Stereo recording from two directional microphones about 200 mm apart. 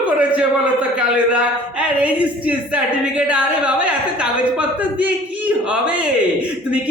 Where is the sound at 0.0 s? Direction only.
5° right (ahead or behind).